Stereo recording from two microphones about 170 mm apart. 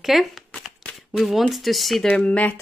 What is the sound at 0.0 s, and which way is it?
Speech, centre (ahead or behind).